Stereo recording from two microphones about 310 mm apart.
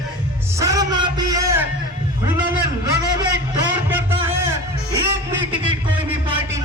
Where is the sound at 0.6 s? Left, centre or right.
Centre.